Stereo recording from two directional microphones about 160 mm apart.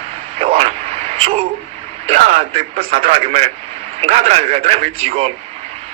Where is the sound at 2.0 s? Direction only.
45° right (ahead or behind).